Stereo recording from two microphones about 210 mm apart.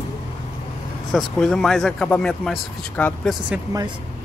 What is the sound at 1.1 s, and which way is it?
Speech, 5° left (ahead or behind).